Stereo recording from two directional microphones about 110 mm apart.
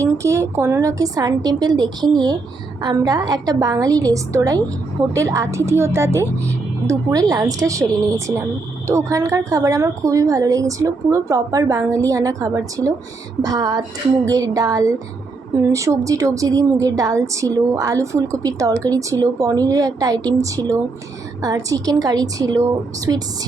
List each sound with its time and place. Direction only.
0.0 s a woman's voice: 25° right (ahead or behind)
8.9 s a woman's voice: 25° right (ahead or behind)